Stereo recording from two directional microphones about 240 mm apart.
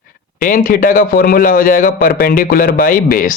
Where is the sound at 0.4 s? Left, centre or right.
Left.